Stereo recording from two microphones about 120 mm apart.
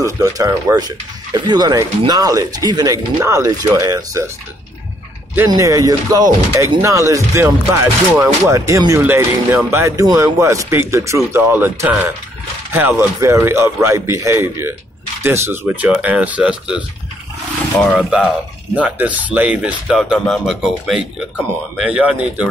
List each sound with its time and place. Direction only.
0.0 s speech: 25° right (ahead or behind)
5.5 s speech: 30° right (ahead or behind); by 16.8 s 10° right (ahead or behind)
17.9 s speech: 5° right (ahead or behind)